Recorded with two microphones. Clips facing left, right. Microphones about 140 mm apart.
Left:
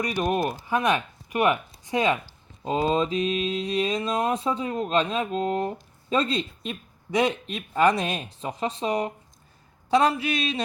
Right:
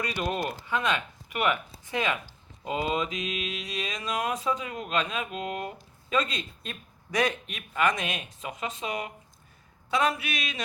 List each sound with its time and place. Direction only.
0.0 s speech: 15° left (ahead or behind)
2.6 s mantra: 30° left (ahead or behind)